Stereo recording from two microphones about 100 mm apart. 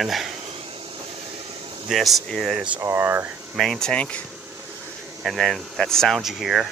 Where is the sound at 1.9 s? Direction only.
Centre (ahead or behind).